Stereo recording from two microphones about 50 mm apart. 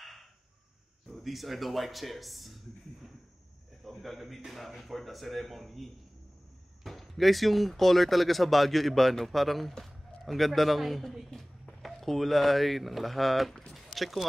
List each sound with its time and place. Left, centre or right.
1.0 s speech: centre
3.8 s a man's voice: centre